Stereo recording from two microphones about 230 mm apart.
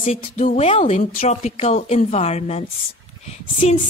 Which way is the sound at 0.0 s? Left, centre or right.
Left.